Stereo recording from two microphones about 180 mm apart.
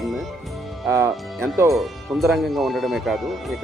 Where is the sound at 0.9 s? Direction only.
15° right (ahead or behind).